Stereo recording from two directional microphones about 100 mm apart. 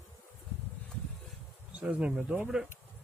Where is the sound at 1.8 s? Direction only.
10° right (ahead or behind).